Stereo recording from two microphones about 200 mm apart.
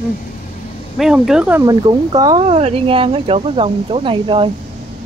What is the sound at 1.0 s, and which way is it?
Speech, 5° right (ahead or behind).